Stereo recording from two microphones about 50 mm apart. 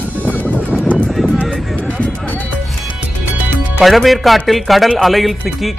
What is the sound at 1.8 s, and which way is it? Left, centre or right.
Music, left.